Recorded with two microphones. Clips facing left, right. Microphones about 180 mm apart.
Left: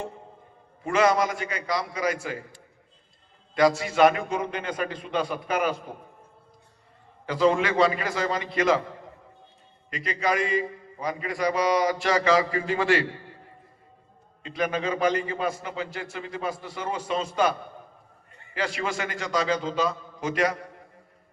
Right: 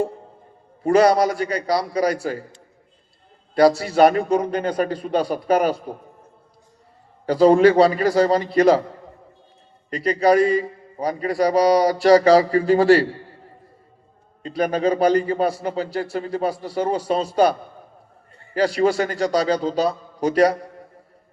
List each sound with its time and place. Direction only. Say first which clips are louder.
0.8 s a man's voice: right 7 dB; 35° right (ahead or behind)
3.5 s a man's voice: right 6 dB; 35° right (ahead or behind)
7.3 s a man's voice: right 9 dB; 35° right (ahead or behind)
9.9 s a man's voice: right 10 dB; 35° right (ahead or behind)
14.4 s a man's voice: right 7 dB; 35° right (ahead or behind)